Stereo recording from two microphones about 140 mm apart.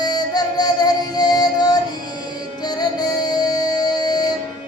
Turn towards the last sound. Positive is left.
turn(degrees=30)  # may be behind; listen again after turning